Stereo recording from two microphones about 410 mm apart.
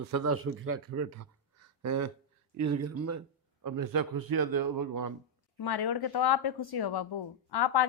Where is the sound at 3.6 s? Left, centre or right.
Right.